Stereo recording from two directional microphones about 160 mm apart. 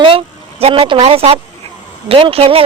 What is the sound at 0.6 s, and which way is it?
A woman's voice, 35° right (ahead or behind).